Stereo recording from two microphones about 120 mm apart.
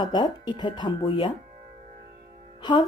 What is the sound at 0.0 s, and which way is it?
Speech, 40° left (ahead or behind).